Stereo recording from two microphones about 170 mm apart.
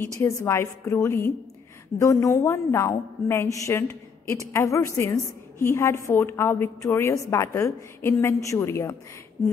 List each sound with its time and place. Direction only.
0.2 s a woman's voice: 15° left (ahead or behind)